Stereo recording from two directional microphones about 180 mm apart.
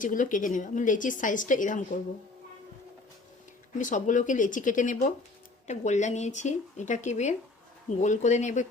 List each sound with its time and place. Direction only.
0.0 s a woman's voice: 45° left (ahead or behind)
3.8 s a woman's voice: 45° left (ahead or behind)